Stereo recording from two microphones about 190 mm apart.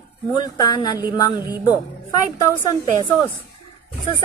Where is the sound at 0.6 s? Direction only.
20° left (ahead or behind).